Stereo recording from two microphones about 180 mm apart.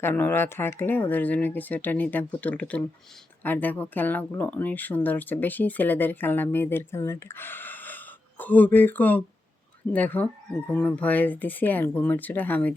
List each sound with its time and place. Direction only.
0.0 s speech: 10° left (ahead or behind)